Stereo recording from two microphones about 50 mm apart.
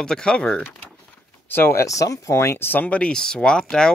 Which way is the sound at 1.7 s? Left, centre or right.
Left.